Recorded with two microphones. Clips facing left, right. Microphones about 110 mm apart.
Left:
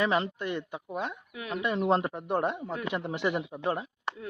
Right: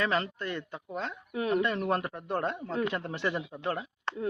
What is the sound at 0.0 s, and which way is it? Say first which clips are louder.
A man's voice: left 2 dB; 20° left (ahead or behind).